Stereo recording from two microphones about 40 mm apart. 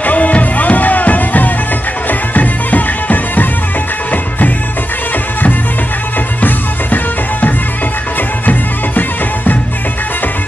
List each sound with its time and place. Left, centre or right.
0.0 s music: left
6.4 s music: left